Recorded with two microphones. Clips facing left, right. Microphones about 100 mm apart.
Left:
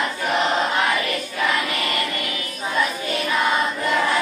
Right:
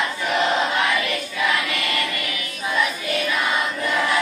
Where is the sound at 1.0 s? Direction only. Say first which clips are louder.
Even; 40° left (ahead or behind).